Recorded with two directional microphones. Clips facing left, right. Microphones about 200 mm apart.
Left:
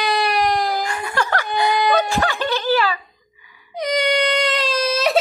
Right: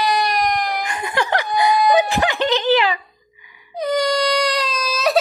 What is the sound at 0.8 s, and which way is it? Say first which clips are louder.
Wail: right 1 dB; 20° right (ahead or behind).